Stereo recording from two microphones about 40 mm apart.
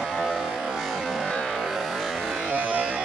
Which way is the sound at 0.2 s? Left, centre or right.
Centre.